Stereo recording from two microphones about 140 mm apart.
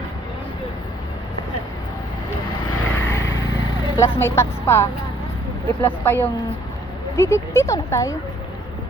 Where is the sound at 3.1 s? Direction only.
20° left (ahead or behind).